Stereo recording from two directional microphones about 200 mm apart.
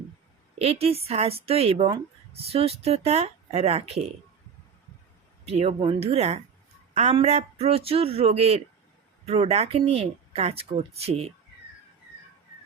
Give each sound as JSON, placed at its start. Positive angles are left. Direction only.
{"t": 0.6, "sound": "speech", "side_deg": -30}
{"t": 5.5, "sound": "speech", "side_deg": -30}